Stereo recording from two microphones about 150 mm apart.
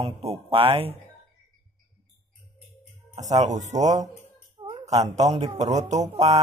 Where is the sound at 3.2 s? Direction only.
50° right (ahead or behind).